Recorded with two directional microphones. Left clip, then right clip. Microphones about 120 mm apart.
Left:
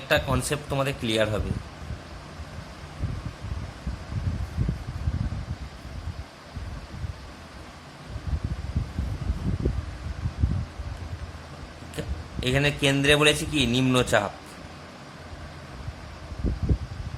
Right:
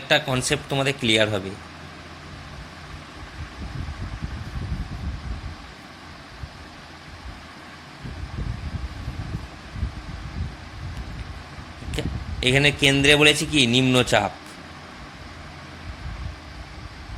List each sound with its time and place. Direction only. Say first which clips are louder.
0.1 s a man's voice: right 3 dB; 15° right (ahead or behind)
11.9 s a man's voice: right 6 dB; 20° right (ahead or behind)